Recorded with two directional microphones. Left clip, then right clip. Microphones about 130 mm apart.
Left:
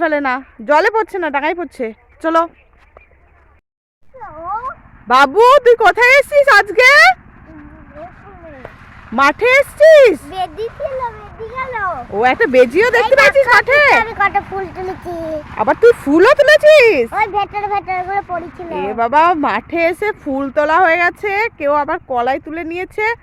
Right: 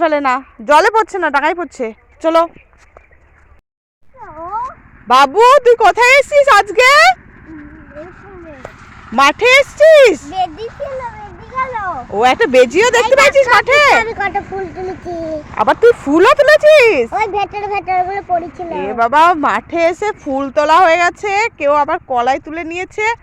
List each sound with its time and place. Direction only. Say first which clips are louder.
0.0 s speech: right 3 dB; 10° left (ahead or behind)
5.0 s speech: right 1 dB; 15° left (ahead or behind)
9.1 s speech: right 2 dB; 5° left (ahead or behind)
10.2 s speech: right 3 dB; 20° left (ahead or behind)
10.7 s a child's voice: left 2 dB; 40° left (ahead or behind)
11.5 s speech: right 2 dB; 25° left (ahead or behind)
12.1 s speech: right 2 dB; centre (ahead or behind)
14.2 s a child's voice: left 3 dB; 35° left (ahead or behind)
14.4 s speech: even; 55° left (ahead or behind); by 15.5 s 40° left (ahead or behind)
15.5 s speech: right 1 dB; 10° left (ahead or behind)
17.8 s speech: right 3 dB; 5° left (ahead or behind)
23.0 s speech: right 1 dB; 25° left (ahead or behind)